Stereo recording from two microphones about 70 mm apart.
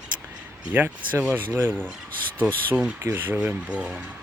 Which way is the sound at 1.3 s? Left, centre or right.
Right.